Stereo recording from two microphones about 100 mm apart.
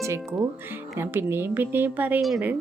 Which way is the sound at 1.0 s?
25° right (ahead or behind).